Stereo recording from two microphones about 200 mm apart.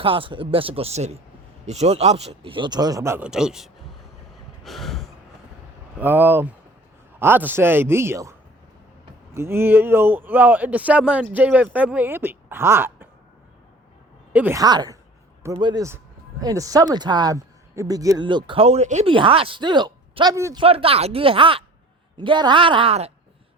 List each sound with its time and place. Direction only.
0.0 s speech: 25° right (ahead or behind); by 3.7 s 5° right (ahead or behind)
4.6 s sigh: centre (ahead or behind)
6.0 s speech: 10° right (ahead or behind)
14.3 s speech: 10° right (ahead or behind)
20.6 s speech: 30° right (ahead or behind)